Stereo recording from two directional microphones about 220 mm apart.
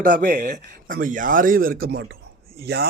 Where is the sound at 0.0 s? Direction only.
40° right (ahead or behind).